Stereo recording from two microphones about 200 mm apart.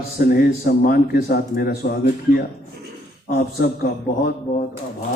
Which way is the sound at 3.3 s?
50° left (ahead or behind).